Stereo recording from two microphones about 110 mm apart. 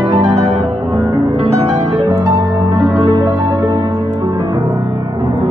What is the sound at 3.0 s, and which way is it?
Music, 50° right (ahead or behind).